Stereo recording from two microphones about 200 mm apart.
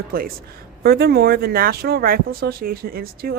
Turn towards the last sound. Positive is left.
turn(degrees=-50)  # may be behind; listen again after turning